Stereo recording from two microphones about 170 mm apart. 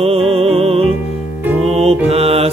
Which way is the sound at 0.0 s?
35° right (ahead or behind).